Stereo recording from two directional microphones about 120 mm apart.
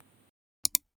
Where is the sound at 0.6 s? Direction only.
Centre (ahead or behind).